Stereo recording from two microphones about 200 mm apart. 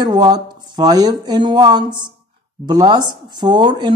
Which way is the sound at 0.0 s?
20° right (ahead or behind).